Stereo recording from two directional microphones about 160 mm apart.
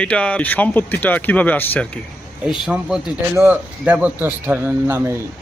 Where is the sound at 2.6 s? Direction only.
5° right (ahead or behind).